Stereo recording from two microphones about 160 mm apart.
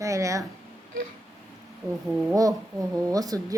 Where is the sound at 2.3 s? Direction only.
20° right (ahead or behind).